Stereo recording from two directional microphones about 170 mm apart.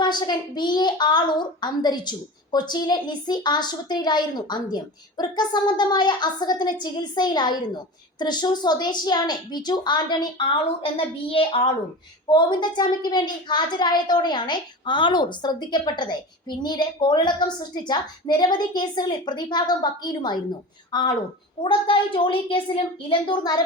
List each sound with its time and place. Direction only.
0.0 s a woman's voice: 25° left (ahead or behind)